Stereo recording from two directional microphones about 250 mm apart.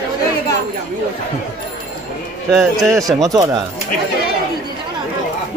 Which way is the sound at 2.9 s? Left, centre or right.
Centre.